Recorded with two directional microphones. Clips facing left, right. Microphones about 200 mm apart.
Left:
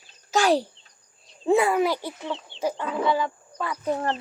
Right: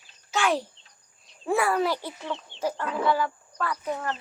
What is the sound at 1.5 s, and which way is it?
Speech, 20° left (ahead or behind).